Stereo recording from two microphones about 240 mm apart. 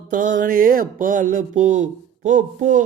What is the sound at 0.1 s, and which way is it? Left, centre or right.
Speech, right.